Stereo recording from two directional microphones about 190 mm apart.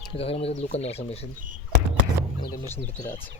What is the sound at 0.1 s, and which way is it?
Speech, 30° left (ahead or behind).